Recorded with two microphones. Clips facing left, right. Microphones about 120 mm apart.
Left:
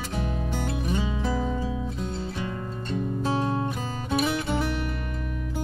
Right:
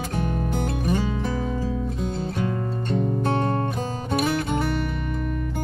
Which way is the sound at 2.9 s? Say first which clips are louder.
Right 3 dB; 55° right (ahead or behind).